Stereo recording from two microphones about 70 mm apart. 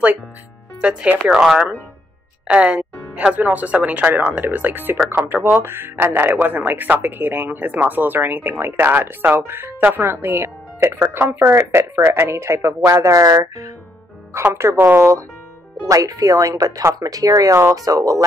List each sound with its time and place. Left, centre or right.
0.7 s speech: centre
2.4 s speech: centre; by 13.5 s right
14.3 s speech: right
15.9 s speech: right